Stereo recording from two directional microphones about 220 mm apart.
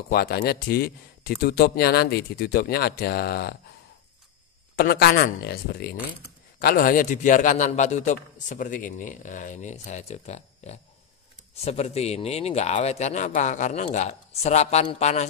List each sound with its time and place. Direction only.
0.1 s speech: 45° left (ahead or behind)
4.7 s a man's voice: 45° left (ahead or behind)